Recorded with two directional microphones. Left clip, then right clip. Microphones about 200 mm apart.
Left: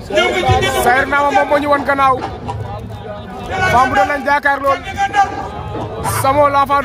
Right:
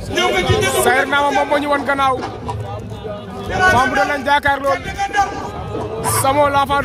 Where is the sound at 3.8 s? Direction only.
Centre (ahead or behind).